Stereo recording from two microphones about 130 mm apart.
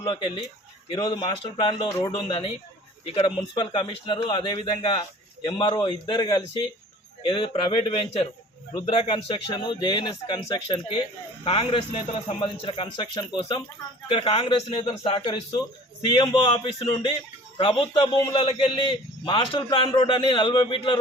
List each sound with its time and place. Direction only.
0.0 s speech: 40° left (ahead or behind)
2.0 s speech: 30° left (ahead or behind)
3.1 s speech: 45° left (ahead or behind)